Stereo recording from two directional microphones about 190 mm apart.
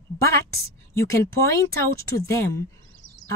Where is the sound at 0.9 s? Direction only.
15° left (ahead or behind).